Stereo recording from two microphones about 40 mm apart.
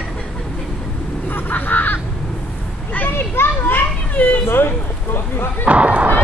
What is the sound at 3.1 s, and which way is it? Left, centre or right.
Speech, left.